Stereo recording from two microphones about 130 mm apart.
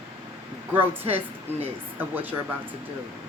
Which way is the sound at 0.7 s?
15° right (ahead or behind).